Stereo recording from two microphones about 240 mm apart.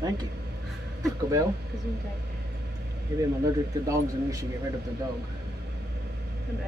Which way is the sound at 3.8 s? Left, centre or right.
Centre.